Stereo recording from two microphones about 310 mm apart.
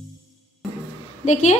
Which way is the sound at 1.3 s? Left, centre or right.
Left.